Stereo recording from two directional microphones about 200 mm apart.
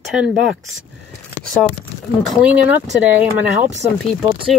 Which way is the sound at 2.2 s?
5° right (ahead or behind).